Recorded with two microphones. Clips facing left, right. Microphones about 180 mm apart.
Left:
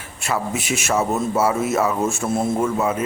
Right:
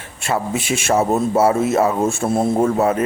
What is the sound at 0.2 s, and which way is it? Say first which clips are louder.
A man's voice: right 3 dB; 30° right (ahead or behind).